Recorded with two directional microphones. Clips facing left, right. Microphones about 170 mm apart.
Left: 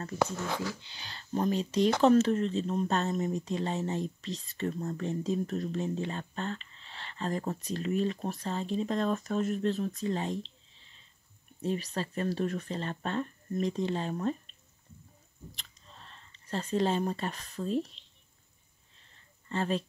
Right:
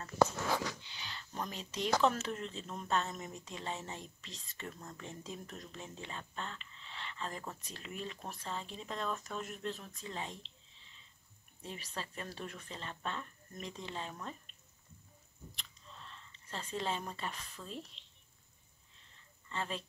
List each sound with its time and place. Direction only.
0.8 s speech: 35° left (ahead or behind)
11.6 s speech: 40° left (ahead or behind)
15.5 s speech: 40° left (ahead or behind)
18.0 s a sound: 35° left (ahead or behind)
19.5 s speech: 40° left (ahead or behind)